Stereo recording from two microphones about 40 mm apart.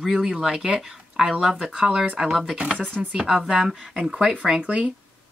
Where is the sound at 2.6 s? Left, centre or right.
Right.